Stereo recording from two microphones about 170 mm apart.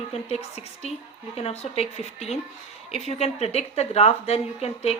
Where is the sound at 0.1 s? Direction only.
40° left (ahead or behind).